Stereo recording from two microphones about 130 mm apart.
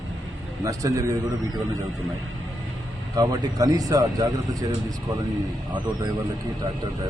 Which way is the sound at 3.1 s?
30° right (ahead or behind).